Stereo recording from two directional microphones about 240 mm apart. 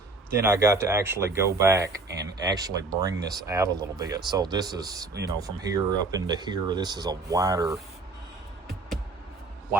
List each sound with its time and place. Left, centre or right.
0.3 s speech: centre